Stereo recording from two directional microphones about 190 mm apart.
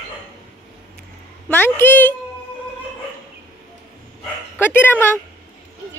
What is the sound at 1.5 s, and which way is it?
Speech, 10° left (ahead or behind).